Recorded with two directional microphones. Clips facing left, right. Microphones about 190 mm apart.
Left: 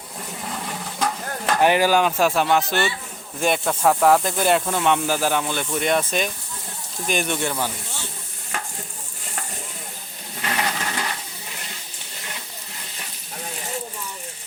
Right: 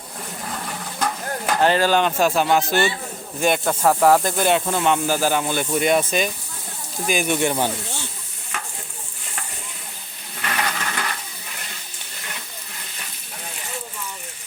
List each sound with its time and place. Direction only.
0.9 s stir: centre (ahead or behind)
1.6 s speech: 15° left (ahead or behind); by 7.3 s 5° right (ahead or behind)
10.4 s a sound: 25° left (ahead or behind)